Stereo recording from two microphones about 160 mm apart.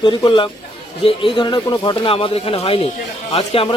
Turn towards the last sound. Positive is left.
turn(degrees=35)  # may be behind; listen again after turning